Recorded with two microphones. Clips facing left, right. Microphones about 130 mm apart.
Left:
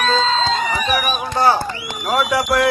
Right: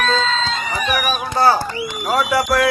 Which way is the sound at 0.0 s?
30° left (ahead or behind).